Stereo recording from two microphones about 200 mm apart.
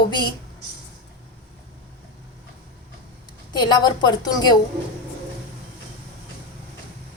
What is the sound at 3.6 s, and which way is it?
Speech, 20° left (ahead or behind).